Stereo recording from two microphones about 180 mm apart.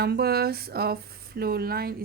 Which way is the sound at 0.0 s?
60° right (ahead or behind).